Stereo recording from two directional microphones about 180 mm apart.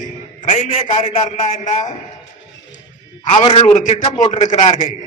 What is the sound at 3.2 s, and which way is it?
A man's voice, 35° left (ahead or behind).